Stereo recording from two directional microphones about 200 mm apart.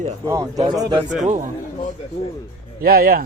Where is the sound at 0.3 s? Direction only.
20° right (ahead or behind).